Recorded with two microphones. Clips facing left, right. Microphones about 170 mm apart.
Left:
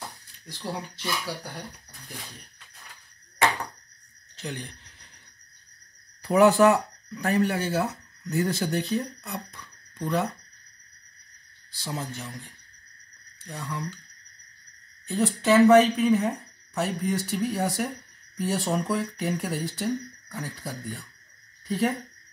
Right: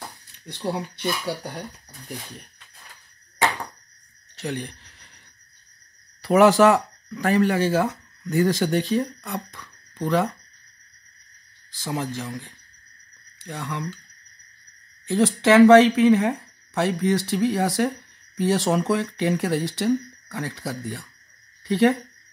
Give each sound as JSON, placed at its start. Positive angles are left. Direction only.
{"t": 0.5, "sound": "speech", "side_deg": -65}
{"t": 4.4, "sound": "speech", "side_deg": -70}
{"t": 6.2, "sound": "speech", "side_deg": -90}
{"t": 11.7, "sound": "speech", "side_deg": -90}
{"t": 13.4, "sound": "speech", "side_deg": -90}
{"t": 15.0, "sound": "speech", "side_deg": -90}